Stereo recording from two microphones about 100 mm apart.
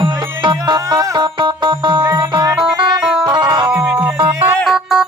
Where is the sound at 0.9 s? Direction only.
35° right (ahead or behind).